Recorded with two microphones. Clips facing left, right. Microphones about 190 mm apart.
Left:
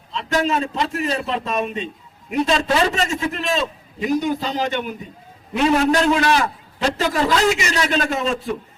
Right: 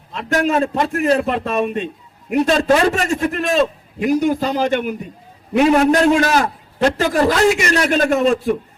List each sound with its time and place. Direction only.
0.1 s a man's voice: 55° right (ahead or behind)